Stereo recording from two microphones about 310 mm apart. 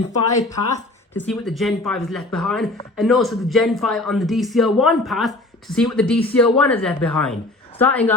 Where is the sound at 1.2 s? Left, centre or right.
Centre.